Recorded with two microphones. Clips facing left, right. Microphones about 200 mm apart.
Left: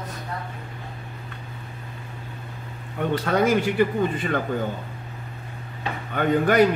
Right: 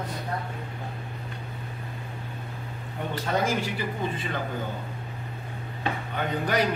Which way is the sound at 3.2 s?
60° left (ahead or behind).